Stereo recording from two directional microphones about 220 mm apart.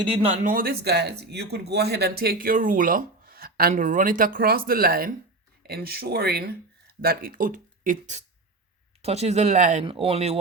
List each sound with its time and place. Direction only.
0.4 s speech: 40° right (ahead or behind)